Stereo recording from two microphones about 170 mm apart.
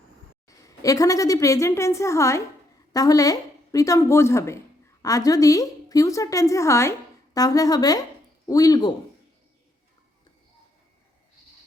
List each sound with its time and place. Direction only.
0.4 s a woman's voice: 20° left (ahead or behind)